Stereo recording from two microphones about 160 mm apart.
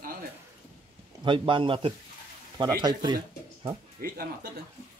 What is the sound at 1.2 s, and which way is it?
A man's voice, 30° right (ahead or behind).